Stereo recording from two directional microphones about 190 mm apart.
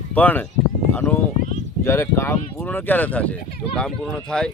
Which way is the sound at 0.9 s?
10° left (ahead or behind).